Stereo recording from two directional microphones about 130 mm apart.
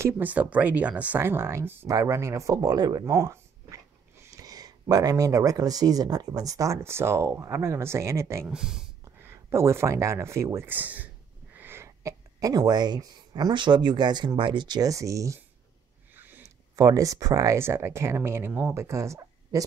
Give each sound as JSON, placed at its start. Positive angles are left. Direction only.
{"t": 0.0, "sound": "speech", "side_deg": -15}
{"t": 8.5, "sound": "speech", "side_deg": -5}
{"t": 9.2, "sound": "speech", "side_deg": -20}
{"t": 16.2, "sound": "a sound", "side_deg": -15}
{"t": 16.7, "sound": "speech", "side_deg": -25}